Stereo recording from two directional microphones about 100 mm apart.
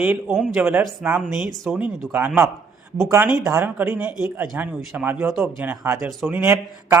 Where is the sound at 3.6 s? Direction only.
20° right (ahead or behind).